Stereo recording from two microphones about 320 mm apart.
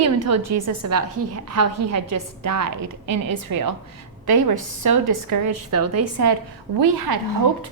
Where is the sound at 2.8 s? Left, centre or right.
Right.